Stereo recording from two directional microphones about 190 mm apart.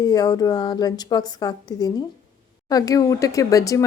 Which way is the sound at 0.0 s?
20° left (ahead or behind).